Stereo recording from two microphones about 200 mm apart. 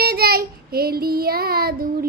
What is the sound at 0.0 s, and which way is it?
Child singing, 50° right (ahead or behind).